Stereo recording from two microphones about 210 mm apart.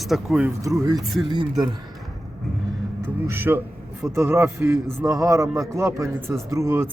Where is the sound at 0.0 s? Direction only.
Centre (ahead or behind).